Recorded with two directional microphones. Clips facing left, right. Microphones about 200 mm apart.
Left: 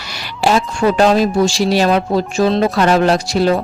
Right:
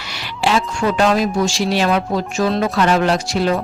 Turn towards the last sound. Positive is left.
turn(degrees=35)  # may be behind; listen again after turning